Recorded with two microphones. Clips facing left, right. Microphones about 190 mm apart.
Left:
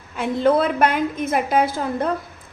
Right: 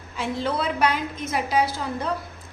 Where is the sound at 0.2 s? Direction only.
55° left (ahead or behind).